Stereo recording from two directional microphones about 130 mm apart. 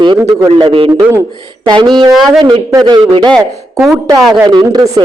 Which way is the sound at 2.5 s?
35° right (ahead or behind).